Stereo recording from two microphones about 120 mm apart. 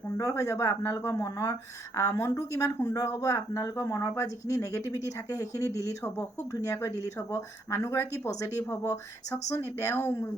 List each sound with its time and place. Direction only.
0.2 s speech: 25° left (ahead or behind)